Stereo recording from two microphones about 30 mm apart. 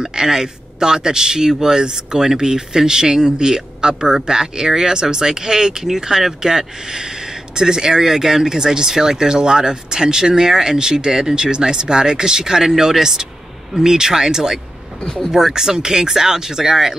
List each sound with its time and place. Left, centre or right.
0.0 s speech: right
15.0 s speech: centre
15.5 s speech: right